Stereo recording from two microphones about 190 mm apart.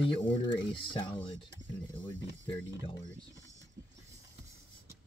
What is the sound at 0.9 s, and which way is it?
Speech, 25° left (ahead or behind).